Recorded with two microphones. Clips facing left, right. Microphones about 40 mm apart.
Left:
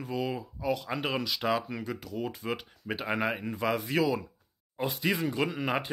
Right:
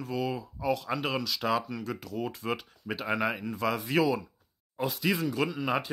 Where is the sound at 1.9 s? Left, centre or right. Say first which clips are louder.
Right 1 dB; centre.